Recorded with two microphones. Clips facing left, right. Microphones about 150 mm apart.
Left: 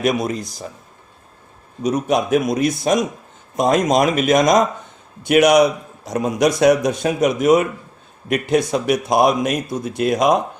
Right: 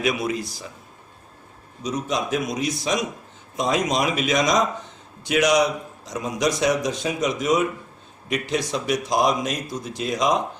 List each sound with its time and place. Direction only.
0.0 s speech: 45° left (ahead or behind)
1.8 s a man's voice: 60° left (ahead or behind)